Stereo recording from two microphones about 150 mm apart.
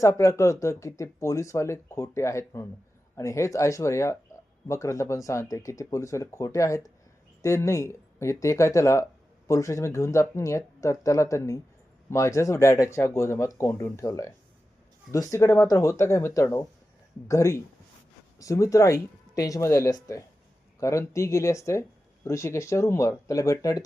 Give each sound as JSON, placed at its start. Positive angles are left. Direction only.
{"t": 0.0, "sound": "speech", "side_deg": 20}